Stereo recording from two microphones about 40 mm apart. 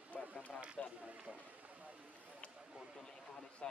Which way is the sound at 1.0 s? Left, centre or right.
Right.